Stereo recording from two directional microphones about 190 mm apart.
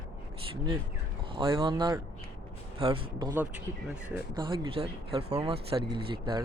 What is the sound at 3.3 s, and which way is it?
Speech, 10° right (ahead or behind).